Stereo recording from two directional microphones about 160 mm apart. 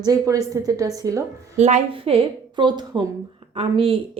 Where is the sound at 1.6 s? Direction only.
45° right (ahead or behind).